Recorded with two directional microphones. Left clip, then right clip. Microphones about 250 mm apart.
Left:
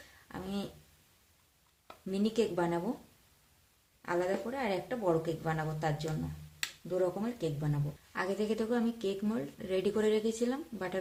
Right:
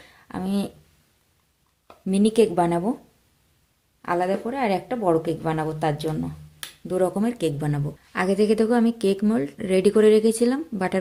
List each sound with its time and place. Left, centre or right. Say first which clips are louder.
0.3 s a sound: right 12 dB; right
2.0 s speech: right 13 dB; right
4.0 s speech: right 9 dB; right